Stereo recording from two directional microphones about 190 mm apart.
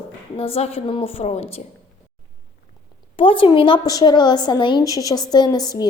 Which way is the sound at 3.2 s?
30° left (ahead or behind).